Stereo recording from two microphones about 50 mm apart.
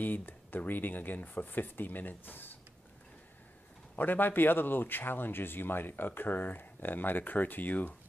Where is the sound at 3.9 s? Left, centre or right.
Left.